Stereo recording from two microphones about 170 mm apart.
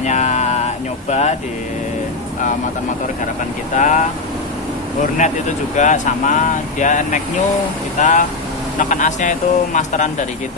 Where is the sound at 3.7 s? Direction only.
45° left (ahead or behind).